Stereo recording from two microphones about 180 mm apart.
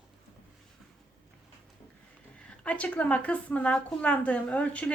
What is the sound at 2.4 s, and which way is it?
Speech, 5° left (ahead or behind).